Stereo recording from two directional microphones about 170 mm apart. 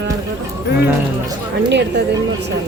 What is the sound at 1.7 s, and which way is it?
Speech, 90° right.